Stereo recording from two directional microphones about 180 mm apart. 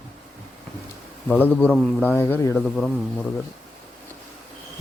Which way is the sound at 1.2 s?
10° left (ahead or behind).